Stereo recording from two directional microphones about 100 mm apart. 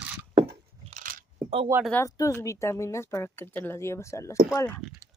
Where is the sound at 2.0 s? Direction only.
30° left (ahead or behind).